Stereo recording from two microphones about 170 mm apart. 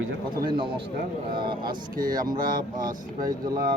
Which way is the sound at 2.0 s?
55° right (ahead or behind).